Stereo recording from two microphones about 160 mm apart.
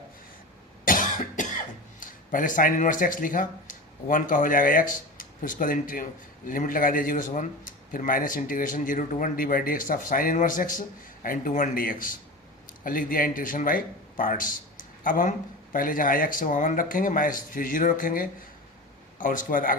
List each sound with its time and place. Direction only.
0.9 s speech: 55° left (ahead or behind)